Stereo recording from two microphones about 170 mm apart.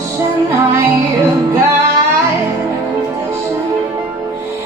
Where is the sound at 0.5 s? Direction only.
15° right (ahead or behind).